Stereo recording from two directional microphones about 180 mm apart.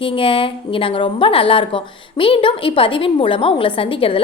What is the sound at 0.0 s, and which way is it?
A woman's voice, 30° left (ahead or behind).